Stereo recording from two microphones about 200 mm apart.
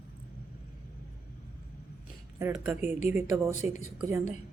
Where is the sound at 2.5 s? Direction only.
10° right (ahead or behind).